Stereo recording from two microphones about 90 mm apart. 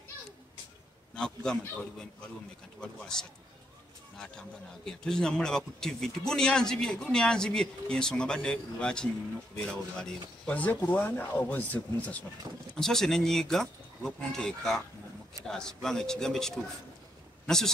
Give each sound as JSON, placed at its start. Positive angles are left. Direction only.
{"t": 1.1, "sound": "a man's voice", "side_deg": 10}
{"t": 2.8, "sound": "a man's voice", "side_deg": 10}
{"t": 12.7, "sound": "speech", "side_deg": 5}